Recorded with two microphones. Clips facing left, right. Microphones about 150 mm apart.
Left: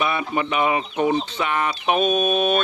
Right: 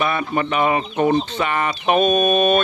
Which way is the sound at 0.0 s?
10° left (ahead or behind).